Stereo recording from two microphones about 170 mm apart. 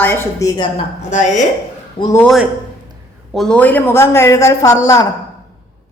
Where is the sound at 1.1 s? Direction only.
45° left (ahead or behind).